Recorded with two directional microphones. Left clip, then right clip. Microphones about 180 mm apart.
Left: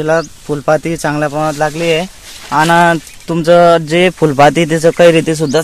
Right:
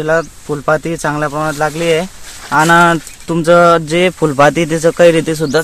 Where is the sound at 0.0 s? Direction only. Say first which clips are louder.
Left 1 dB; 35° left (ahead or behind).